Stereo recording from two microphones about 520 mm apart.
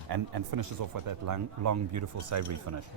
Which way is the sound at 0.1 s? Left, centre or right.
Right.